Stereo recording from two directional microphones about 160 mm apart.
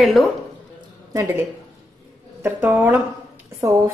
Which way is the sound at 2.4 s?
10° right (ahead or behind).